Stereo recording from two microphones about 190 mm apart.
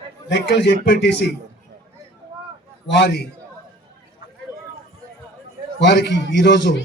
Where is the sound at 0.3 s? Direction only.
65° left (ahead or behind).